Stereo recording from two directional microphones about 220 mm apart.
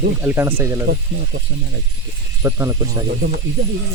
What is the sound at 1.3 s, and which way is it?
Speech, 60° right (ahead or behind).